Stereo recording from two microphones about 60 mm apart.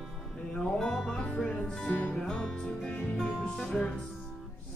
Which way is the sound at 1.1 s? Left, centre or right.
Centre.